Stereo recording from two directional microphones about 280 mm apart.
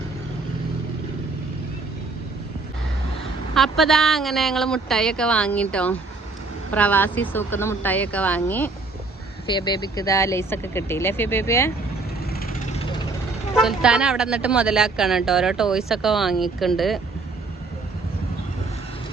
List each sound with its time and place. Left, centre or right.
3.5 s speech: centre
12.3 s vehicle: left
13.6 s speech: centre